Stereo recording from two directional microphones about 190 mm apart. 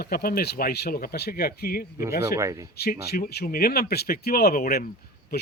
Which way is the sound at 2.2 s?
15° right (ahead or behind).